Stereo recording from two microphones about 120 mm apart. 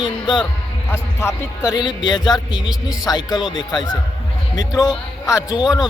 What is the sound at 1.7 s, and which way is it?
Speech, 35° left (ahead or behind).